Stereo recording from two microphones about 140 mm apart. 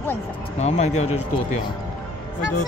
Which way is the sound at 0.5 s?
50° left (ahead or behind).